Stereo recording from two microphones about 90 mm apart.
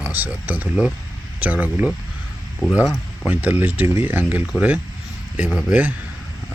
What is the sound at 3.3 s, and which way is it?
Speech, 20° right (ahead or behind).